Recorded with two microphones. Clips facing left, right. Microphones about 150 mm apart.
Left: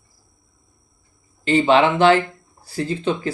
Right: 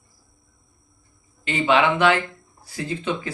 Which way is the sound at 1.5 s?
35° left (ahead or behind).